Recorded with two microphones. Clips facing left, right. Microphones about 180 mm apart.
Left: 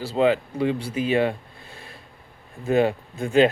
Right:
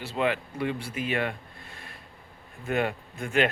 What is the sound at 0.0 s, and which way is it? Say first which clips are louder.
Speech: left 7 dB; 35° left (ahead or behind).